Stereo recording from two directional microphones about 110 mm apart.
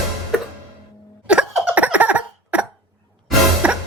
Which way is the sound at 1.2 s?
10° right (ahead or behind).